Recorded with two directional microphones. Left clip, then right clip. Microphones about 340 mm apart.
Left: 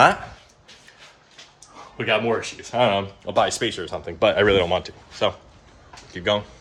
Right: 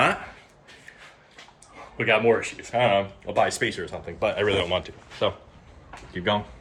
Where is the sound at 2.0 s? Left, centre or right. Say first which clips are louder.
Right 1 dB; centre.